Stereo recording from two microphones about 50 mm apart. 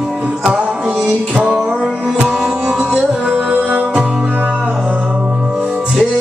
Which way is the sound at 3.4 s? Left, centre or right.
Right.